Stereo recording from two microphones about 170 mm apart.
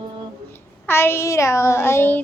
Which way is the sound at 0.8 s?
15° left (ahead or behind).